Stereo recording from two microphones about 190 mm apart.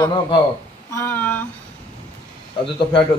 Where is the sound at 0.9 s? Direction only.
10° left (ahead or behind).